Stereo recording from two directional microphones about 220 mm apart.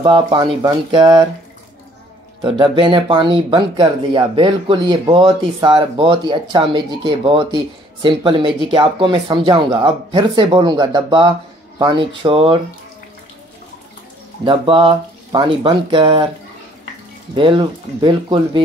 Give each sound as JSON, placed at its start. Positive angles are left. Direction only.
{"t": 0.0, "sound": "speech", "side_deg": -20}
{"t": 2.4, "sound": "speech", "side_deg": -25}
{"t": 14.4, "sound": "speech", "side_deg": -25}
{"t": 17.4, "sound": "speech", "side_deg": -20}